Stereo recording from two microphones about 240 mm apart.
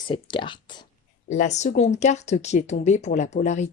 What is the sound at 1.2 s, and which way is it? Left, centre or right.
Speech, left.